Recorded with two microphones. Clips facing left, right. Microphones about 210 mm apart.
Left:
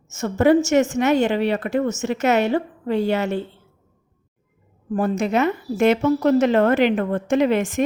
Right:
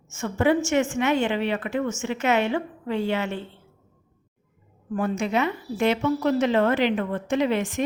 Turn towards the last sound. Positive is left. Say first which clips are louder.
# left 5 dB
turn(degrees=45)  # may be behind; listen again after turning